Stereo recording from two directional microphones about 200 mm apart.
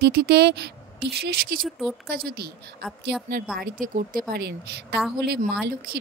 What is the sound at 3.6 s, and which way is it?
Speech, 45° right (ahead or behind).